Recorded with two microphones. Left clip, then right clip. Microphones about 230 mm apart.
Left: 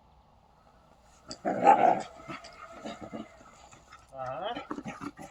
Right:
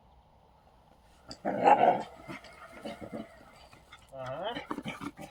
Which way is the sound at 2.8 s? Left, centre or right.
Centre.